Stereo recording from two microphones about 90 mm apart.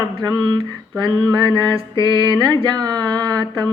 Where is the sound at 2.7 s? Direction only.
50° right (ahead or behind).